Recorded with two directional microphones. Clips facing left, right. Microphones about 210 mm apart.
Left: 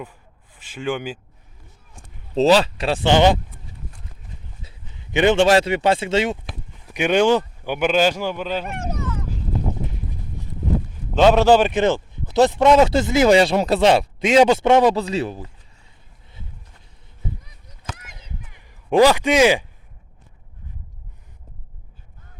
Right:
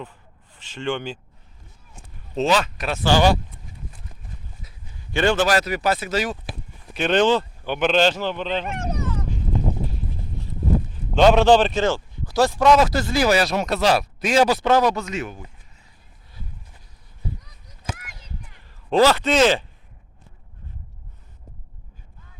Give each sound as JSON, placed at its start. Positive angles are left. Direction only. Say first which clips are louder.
{"t": 0.5, "sound": "speech", "louder": "left 1 dB", "side_deg": 10}
{"t": 2.3, "sound": "a man's voice", "louder": "left 5 dB", "side_deg": 30}
{"t": 4.6, "sound": "speech", "louder": "left 1 dB", "side_deg": 20}
{"t": 6.4, "sound": "a sound", "louder": "right 1 dB", "side_deg": -5}
{"t": 6.9, "sound": "speech", "louder": "left 2 dB", "side_deg": 10}
{"t": 11.2, "sound": "a man's voice", "louder": "left 1 dB", "side_deg": 5}
{"t": 17.9, "sound": "a sound", "louder": "even", "side_deg": 25}
{"t": 18.5, "sound": "speech", "louder": "left 3 dB", "side_deg": 15}